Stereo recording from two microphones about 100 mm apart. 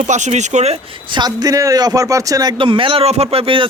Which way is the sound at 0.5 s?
90° right.